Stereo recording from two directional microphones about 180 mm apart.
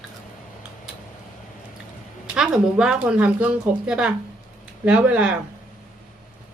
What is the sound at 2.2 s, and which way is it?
Speech, 5° right (ahead or behind).